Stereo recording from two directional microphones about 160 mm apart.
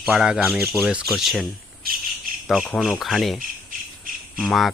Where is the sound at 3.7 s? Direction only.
60° right (ahead or behind).